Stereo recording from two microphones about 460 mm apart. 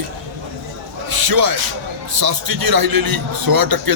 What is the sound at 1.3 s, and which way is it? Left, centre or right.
A man's voice, right.